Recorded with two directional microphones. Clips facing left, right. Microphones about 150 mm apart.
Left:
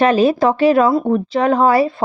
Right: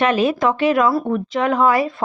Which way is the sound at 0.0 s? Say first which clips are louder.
Left 4 dB; 35° left (ahead or behind).